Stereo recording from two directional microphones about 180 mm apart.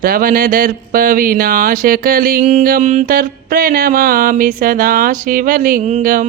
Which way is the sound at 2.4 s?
40° right (ahead or behind).